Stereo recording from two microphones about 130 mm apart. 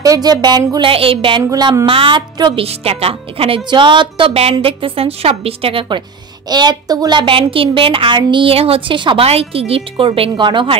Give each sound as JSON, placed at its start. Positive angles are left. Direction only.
{"t": 0.0, "sound": "a child's voice", "side_deg": -30}
{"t": 0.8, "sound": "a woman's voice", "side_deg": -45}
{"t": 1.5, "sound": "a child's voice", "side_deg": -30}
{"t": 2.6, "sound": "a woman's voice", "side_deg": -50}
{"t": 6.5, "sound": "a child's voice", "side_deg": -35}